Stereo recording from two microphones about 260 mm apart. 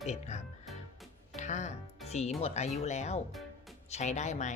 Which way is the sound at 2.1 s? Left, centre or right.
Left.